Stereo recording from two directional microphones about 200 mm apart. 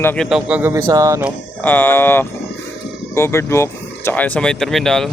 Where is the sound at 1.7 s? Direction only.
10° left (ahead or behind).